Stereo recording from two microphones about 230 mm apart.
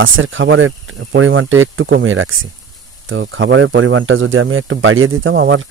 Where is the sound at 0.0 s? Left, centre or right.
Right.